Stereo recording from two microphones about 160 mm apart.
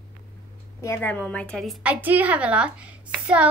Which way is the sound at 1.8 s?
10° right (ahead or behind).